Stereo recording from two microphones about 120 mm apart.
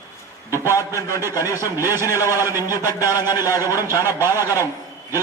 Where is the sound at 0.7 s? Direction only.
25° left (ahead or behind).